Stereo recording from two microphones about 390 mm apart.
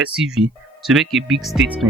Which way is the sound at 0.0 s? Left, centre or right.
Centre.